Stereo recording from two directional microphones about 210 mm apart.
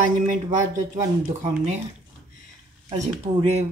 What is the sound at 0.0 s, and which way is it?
Speech, 40° right (ahead or behind).